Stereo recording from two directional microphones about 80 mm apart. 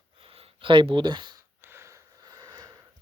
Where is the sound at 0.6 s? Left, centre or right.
Right.